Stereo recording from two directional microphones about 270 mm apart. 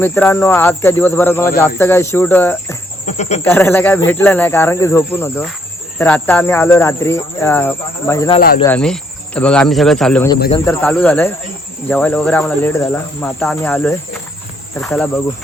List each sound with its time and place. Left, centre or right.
0.0 s speech: centre
3.1 s speech: left
3.4 s speech: centre